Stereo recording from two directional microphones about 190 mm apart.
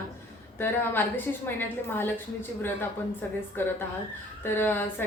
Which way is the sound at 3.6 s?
10° left (ahead or behind).